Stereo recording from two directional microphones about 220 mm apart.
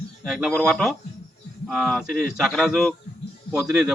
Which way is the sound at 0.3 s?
Centre (ahead or behind).